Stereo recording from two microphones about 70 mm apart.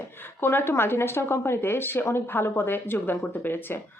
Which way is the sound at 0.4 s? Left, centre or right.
Left.